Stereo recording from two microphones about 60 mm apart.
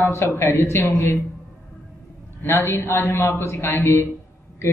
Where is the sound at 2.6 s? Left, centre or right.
Left.